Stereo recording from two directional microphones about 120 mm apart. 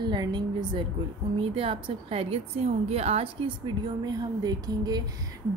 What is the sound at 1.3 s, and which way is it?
A woman's voice, 50° right (ahead or behind).